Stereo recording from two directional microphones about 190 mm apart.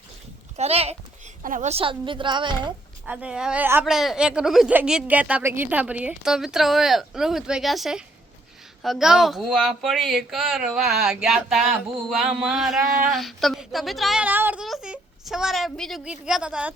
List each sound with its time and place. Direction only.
0.5 s a woman's voice: 35° right (ahead or behind)
3.1 s a woman's voice: 5° right (ahead or behind)